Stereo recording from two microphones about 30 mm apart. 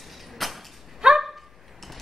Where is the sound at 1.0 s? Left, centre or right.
Right.